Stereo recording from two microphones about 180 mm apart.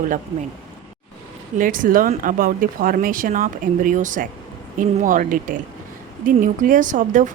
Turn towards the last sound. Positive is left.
turn(degrees=-45)  # may be behind; listen again after turning